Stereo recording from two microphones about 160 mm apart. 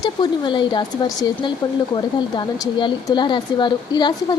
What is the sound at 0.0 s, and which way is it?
Speech, 30° left (ahead or behind).